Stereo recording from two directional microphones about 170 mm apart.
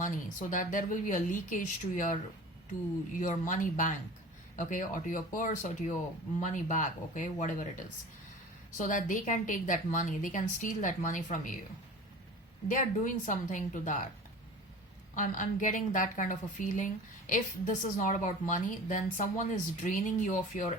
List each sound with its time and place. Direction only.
0.0 s a woman's voice: 50° left (ahead or behind)
3.2 s a woman's voice: 50° left (ahead or behind)
12.6 s a woman's voice: 50° left (ahead or behind)
15.1 s a woman's voice: 50° left (ahead or behind)